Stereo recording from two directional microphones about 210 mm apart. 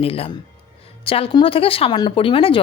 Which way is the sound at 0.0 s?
25° left (ahead or behind).